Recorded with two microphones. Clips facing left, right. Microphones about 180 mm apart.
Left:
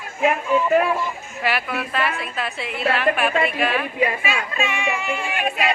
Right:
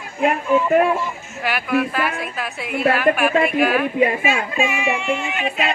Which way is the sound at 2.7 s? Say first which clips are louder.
Right 6 dB; 50° right (ahead or behind).